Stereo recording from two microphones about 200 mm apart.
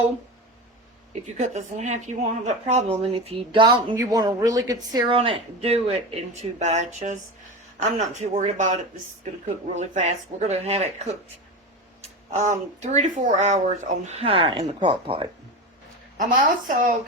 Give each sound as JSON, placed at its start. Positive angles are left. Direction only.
{"t": 1.4, "sound": "a woman's voice", "side_deg": -35}
{"t": 8.2, "sound": "speech", "side_deg": -35}
{"t": 9.7, "sound": "speech", "side_deg": -35}
{"t": 12.3, "sound": "speech", "side_deg": -35}
{"t": 16.1, "sound": "speech", "side_deg": -40}